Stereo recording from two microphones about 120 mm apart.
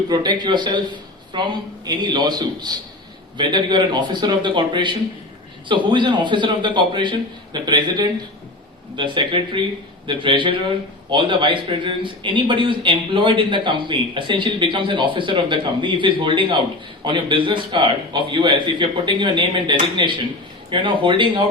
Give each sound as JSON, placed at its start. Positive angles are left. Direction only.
{"t": 0.1, "sound": "a man's voice", "side_deg": -35}